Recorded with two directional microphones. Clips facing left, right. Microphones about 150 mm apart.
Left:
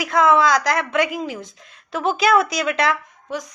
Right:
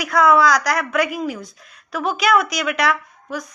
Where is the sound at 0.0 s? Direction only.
25° left (ahead or behind).